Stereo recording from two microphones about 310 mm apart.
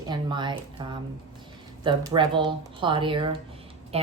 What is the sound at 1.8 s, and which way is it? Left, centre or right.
Speech, centre.